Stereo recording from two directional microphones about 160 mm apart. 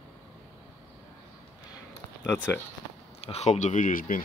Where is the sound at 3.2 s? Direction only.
40° left (ahead or behind); by 4.2 s 55° left (ahead or behind).